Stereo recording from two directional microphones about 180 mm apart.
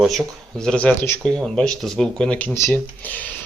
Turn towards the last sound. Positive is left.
turn(degrees=10)  # may be behind; listen again after turning